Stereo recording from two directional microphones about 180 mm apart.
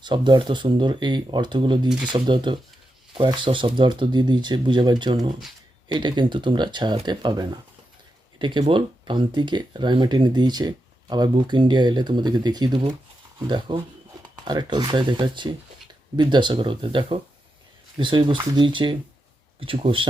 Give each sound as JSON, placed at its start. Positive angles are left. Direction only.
{"t": 0.0, "sound": "speech", "side_deg": -25}